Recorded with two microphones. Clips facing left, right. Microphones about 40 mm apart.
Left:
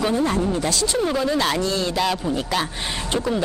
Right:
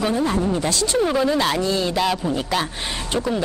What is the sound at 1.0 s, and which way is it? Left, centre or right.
A man's voice, centre.